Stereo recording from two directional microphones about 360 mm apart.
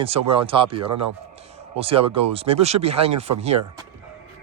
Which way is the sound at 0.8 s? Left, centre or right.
Right.